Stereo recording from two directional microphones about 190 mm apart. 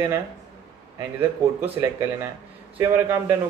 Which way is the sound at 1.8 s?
15° right (ahead or behind).